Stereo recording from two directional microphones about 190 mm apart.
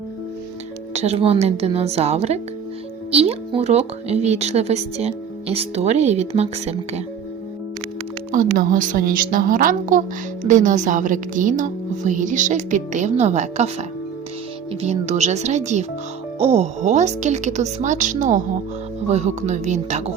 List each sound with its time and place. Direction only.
0.9 s speech: 35° right (ahead or behind)
8.3 s a woman's voice: 45° right (ahead or behind)